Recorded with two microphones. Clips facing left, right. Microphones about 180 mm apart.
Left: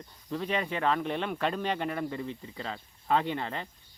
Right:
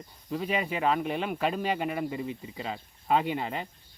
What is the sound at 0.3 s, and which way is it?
Speech, 5° right (ahead or behind).